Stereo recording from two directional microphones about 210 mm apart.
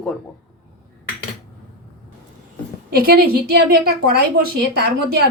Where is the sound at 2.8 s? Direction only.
45° right (ahead or behind).